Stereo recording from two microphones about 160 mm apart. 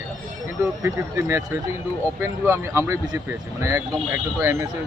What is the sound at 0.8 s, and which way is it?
Speech, 15° right (ahead or behind).